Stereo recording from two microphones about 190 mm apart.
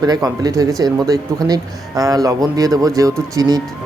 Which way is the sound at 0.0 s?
20° right (ahead or behind).